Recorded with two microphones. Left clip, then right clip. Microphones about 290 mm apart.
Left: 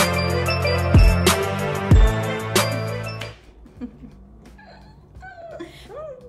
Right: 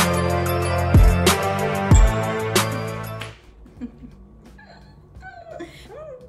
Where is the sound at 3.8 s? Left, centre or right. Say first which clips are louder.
Even; centre.